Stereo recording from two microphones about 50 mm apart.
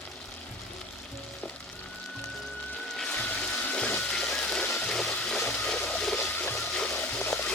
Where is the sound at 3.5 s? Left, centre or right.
Left.